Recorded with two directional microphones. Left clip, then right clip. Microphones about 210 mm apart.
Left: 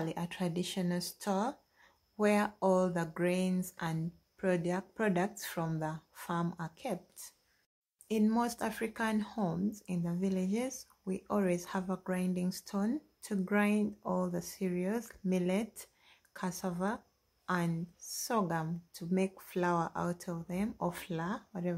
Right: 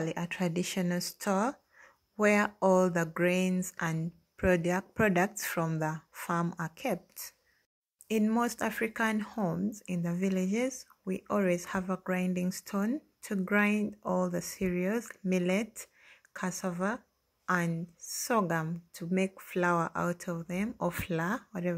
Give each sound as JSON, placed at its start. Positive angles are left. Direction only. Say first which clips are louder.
{"t": 0.0, "sound": "speech", "louder": "right 4 dB", "side_deg": -15}